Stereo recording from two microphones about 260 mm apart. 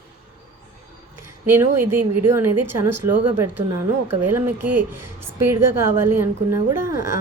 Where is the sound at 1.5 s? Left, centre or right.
Centre.